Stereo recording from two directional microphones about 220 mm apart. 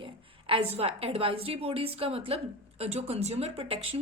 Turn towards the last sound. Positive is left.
turn(degrees=-25)  # may be behind; listen again after turning